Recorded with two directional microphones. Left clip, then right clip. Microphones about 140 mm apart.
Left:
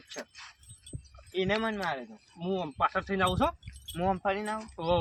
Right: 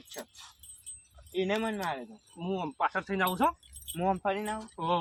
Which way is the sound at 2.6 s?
25° left (ahead or behind).